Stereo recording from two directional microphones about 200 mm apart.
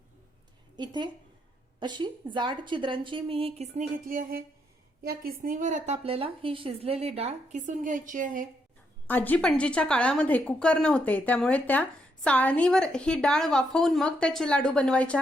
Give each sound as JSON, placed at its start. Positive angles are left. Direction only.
{"t": 0.8, "sound": "a woman's voice", "side_deg": -20}
{"t": 9.0, "sound": "speech", "side_deg": 10}